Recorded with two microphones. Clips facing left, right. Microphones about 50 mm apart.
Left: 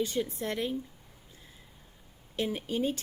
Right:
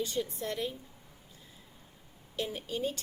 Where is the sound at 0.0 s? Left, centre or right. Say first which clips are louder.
Left 3 dB; left.